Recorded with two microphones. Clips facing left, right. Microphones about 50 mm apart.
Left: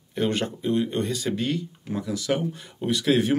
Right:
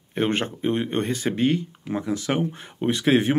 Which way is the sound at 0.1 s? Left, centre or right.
Right.